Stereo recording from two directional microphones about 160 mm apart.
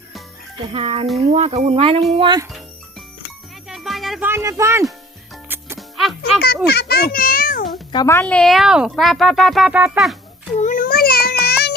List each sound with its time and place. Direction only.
0.7 s speech: 35° right (ahead or behind)
3.7 s music: centre (ahead or behind)
4.3 s speech: 15° right (ahead or behind)
5.7 s music: centre (ahead or behind)
6.7 s a child's voice: 90° left; by 7.7 s 60° left (ahead or behind)
7.9 s speech: 15° left (ahead or behind); by 10.2 s 5° right (ahead or behind)
10.6 s a sound: 55° left (ahead or behind); by 11.7 s 85° left